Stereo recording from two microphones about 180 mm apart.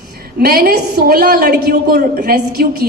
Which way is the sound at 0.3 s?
55° right (ahead or behind).